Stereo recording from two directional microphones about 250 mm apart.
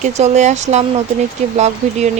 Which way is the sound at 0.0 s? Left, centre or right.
Right.